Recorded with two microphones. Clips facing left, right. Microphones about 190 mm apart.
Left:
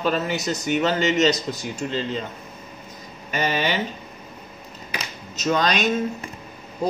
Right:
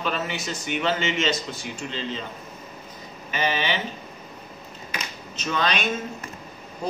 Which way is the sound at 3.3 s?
45° left (ahead or behind).